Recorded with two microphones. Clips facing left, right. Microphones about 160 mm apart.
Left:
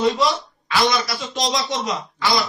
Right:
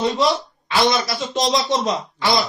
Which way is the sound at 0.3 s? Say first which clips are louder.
Right 2 dB; 25° right (ahead or behind).